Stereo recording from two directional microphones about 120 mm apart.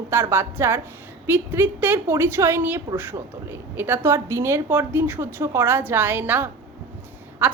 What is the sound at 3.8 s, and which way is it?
A woman's voice, 20° right (ahead or behind).